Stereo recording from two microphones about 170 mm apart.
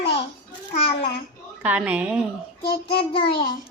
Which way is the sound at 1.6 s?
10° right (ahead or behind).